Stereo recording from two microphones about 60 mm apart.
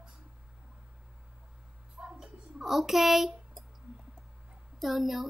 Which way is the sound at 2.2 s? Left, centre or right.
Centre.